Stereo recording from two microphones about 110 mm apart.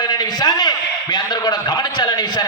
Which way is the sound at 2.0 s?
40° left (ahead or behind).